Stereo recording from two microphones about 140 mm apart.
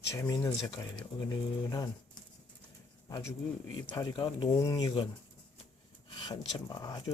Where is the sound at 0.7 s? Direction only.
35° left (ahead or behind).